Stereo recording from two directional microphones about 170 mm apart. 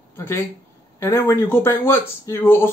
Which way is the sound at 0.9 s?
15° left (ahead or behind).